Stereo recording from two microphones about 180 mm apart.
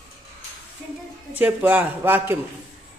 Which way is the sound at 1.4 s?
10° right (ahead or behind).